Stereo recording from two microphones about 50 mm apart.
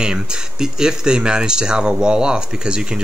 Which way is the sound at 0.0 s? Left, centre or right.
Centre.